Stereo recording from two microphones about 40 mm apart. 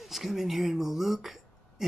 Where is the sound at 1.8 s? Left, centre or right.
Centre.